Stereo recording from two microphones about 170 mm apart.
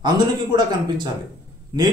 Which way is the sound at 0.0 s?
25° right (ahead or behind).